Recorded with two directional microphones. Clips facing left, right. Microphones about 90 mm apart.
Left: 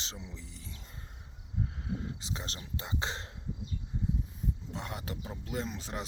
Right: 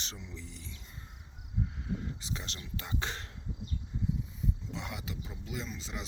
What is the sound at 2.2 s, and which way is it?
Speech, 30° left (ahead or behind).